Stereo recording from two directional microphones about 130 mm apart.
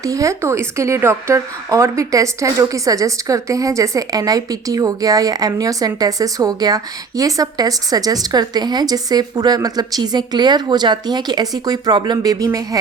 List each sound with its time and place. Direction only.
0.0 s speech: 25° right (ahead or behind)